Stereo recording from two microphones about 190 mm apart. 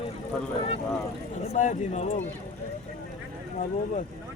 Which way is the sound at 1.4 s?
40° left (ahead or behind).